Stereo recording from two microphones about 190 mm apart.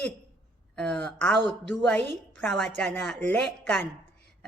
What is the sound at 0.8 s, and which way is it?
A woman's voice, 5° left (ahead or behind).